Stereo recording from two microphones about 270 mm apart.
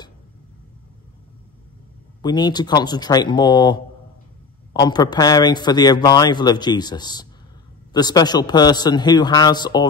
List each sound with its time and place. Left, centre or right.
2.2 s a man's voice: centre